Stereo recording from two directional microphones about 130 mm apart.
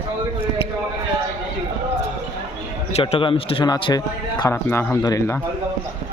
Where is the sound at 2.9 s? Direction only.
55° left (ahead or behind).